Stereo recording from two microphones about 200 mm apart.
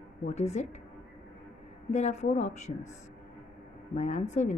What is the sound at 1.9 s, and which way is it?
Speech, 35° left (ahead or behind).